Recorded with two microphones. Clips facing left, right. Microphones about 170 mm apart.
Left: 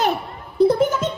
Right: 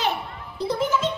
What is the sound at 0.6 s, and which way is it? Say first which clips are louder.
Music: left 7 dB; 50° left (ahead or behind).